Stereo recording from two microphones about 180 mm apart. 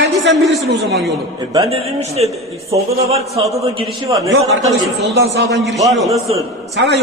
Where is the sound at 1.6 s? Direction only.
35° right (ahead or behind).